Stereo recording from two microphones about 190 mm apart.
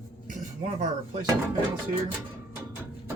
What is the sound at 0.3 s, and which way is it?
Speech, 40° right (ahead or behind).